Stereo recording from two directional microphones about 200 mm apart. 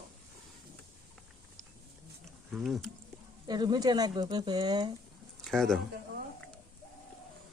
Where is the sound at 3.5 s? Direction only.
20° right (ahead or behind).